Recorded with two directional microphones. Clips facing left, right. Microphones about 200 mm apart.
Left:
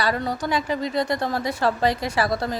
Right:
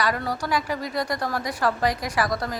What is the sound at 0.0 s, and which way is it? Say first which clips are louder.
A woman's voice: left 2 dB; 25° left (ahead or behind).